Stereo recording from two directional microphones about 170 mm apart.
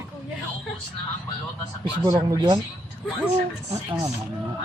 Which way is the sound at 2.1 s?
25° right (ahead or behind).